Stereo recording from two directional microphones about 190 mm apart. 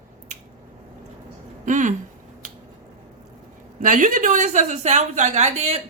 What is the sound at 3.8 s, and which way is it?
A woman's voice, 45° right (ahead or behind).